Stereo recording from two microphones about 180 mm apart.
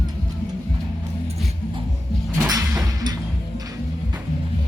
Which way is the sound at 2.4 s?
20° right (ahead or behind).